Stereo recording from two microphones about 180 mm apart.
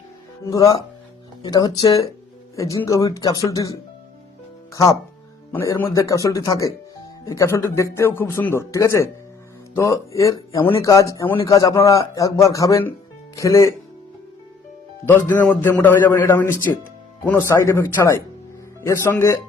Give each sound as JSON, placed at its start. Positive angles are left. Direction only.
{"t": 0.5, "sound": "speech", "side_deg": 20}
{"t": 15.0, "sound": "speech", "side_deg": 10}